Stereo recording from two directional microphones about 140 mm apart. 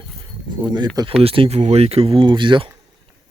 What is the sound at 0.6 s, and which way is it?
Speech, 30° right (ahead or behind).